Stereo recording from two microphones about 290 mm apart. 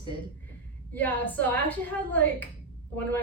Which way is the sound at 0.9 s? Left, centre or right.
Centre.